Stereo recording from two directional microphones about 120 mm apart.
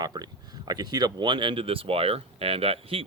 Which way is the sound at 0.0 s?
35° right (ahead or behind).